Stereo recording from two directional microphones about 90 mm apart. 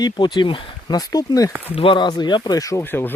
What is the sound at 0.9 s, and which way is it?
Speech, 45° left (ahead or behind).